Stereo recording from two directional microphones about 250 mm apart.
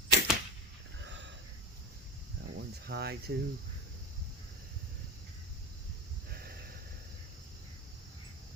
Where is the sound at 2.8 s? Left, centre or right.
Right.